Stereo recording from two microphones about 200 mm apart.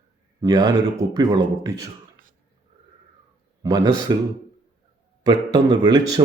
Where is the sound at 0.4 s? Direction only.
20° right (ahead or behind).